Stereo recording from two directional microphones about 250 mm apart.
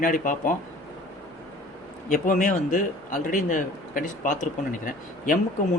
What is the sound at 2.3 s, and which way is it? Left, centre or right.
A man's voice, left.